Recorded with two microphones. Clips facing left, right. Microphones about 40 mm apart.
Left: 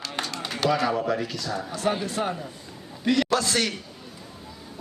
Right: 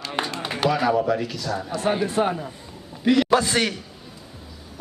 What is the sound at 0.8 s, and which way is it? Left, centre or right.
Speech, centre.